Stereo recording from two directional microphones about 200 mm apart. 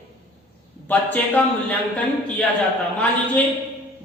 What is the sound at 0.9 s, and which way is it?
Speech, 5° left (ahead or behind).